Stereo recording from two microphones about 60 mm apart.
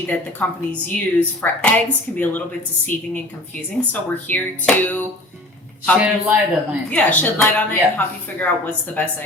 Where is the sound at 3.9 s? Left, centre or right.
Left.